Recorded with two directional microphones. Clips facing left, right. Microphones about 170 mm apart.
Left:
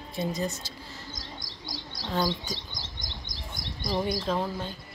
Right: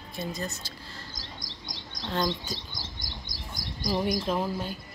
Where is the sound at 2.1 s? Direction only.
10° left (ahead or behind).